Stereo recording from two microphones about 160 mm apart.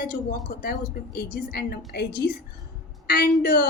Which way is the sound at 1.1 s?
70° left (ahead or behind).